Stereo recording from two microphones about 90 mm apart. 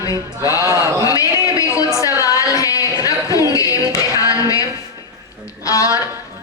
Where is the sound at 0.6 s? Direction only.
40° right (ahead or behind).